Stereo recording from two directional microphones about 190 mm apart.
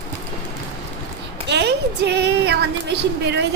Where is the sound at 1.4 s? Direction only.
60° right (ahead or behind).